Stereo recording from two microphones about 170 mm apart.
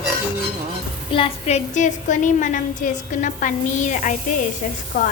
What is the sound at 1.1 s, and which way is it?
A woman's voice, 35° left (ahead or behind).